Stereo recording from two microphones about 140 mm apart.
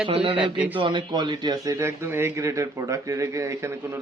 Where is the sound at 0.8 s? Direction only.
35° right (ahead or behind).